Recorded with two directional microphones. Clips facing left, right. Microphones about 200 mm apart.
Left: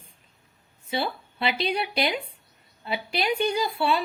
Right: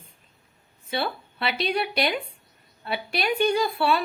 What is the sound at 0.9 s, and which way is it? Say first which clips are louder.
A woman's voice: even; 20° left (ahead or behind).